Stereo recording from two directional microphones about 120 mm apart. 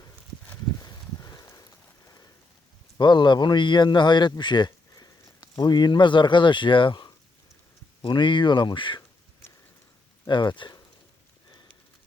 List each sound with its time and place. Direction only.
0.8 s a sound: 30° left (ahead or behind)
3.0 s speech: 40° left (ahead or behind)
10.2 s speech: 40° left (ahead or behind)